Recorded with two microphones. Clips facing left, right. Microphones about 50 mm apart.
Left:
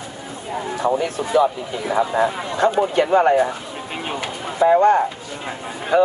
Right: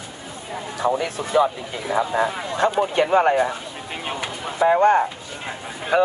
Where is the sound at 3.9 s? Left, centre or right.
Centre.